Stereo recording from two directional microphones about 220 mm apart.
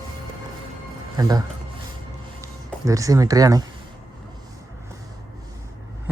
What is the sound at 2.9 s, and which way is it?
Speech, 15° right (ahead or behind).